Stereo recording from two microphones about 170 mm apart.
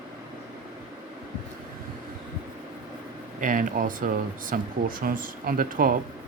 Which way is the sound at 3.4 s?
50° right (ahead or behind).